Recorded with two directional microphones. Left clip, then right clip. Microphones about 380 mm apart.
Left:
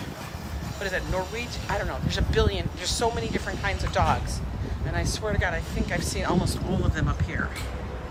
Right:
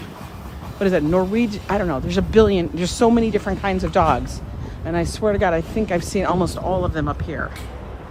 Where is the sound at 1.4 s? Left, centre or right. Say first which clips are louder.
Right 8 dB; centre.